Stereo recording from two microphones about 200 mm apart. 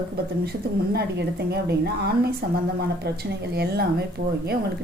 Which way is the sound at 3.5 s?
55° right (ahead or behind).